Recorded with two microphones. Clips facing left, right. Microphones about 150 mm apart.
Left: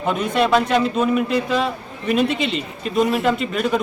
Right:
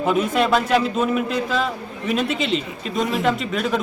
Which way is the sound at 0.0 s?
5° right (ahead or behind).